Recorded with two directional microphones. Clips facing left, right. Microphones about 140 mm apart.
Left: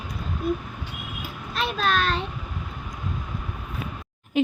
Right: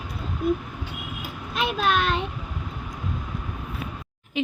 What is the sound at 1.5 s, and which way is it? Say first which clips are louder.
Speech: right 1 dB; 15° right (ahead or behind).